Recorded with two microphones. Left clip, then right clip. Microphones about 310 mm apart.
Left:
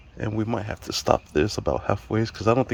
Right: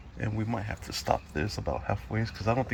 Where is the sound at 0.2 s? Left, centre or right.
Left.